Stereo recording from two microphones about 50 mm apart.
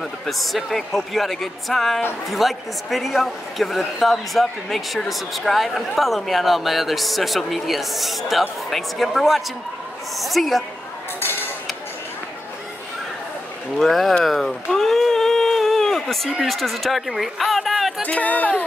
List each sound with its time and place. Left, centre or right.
0.0 s speech: centre
11.1 s cutlery: left
13.7 s speech: centre
14.2 s a sound: centre
16.3 s speech: centre
18.2 s speech: left